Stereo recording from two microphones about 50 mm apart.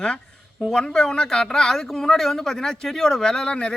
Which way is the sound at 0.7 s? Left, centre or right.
Centre.